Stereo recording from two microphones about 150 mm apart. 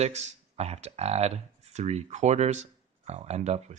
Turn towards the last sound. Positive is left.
turn(degrees=-45)  # may be behind; listen again after turning